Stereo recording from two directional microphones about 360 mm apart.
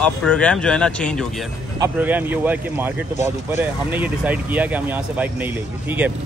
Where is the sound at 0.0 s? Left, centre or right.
Centre.